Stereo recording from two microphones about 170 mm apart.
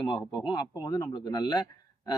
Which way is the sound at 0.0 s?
25° left (ahead or behind).